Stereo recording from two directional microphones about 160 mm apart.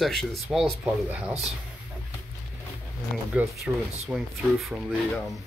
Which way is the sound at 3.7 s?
5° right (ahead or behind).